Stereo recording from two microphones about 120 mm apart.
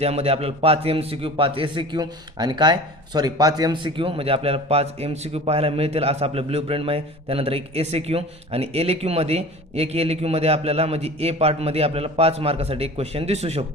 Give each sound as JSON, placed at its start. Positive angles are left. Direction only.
{"t": 0.0, "sound": "a man's voice", "side_deg": -60}